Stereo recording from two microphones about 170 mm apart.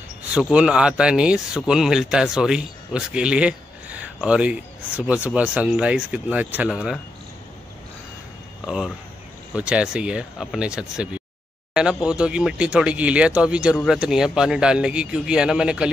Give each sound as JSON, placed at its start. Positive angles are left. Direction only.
{"t": 0.3, "sound": "speech", "side_deg": -5}
{"t": 8.6, "sound": "speech", "side_deg": -5}